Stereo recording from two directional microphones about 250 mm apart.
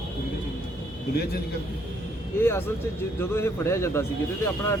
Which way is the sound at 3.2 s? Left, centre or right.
Centre.